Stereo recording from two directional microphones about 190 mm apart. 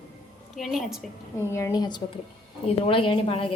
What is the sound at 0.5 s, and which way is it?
Speech, centre (ahead or behind).